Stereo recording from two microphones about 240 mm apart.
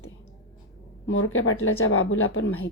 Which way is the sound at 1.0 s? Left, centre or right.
Left.